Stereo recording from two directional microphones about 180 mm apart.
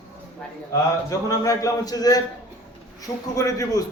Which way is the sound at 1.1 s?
20° left (ahead or behind).